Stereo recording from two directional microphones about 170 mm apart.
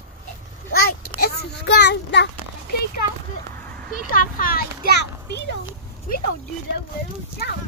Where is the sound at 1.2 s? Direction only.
90° left.